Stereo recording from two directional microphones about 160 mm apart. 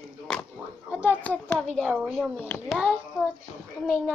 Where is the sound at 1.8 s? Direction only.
10° right (ahead or behind).